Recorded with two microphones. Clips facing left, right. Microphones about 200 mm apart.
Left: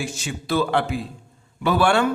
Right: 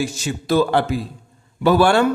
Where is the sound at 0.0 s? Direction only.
40° right (ahead or behind).